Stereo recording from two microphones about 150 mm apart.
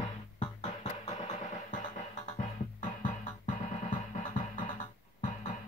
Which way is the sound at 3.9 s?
40° left (ahead or behind).